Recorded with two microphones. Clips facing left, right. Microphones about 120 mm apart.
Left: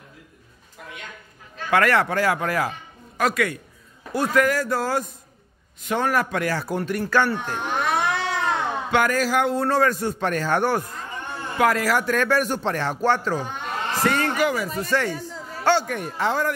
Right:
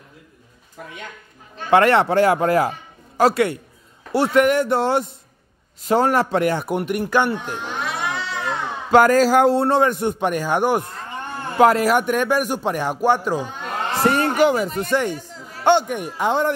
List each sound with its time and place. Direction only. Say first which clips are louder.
1.7 s a man's voice: right 5 dB; 25° right (ahead or behind)
7.5 s cat: left 3 dB; 55° left (ahead or behind)
8.9 s a man's voice: right 8 dB; 35° right (ahead or behind); by 10.8 s 15° right (ahead or behind)
11.5 s speech: right 5 dB; 25° right (ahead or behind)
14.0 s a man's voice: right 5 dB; 25° right (ahead or behind)